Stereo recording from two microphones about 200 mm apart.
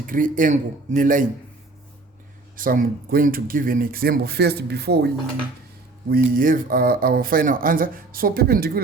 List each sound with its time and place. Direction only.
0.0 s speech: 40° right (ahead or behind)
2.6 s speech: 45° right (ahead or behind)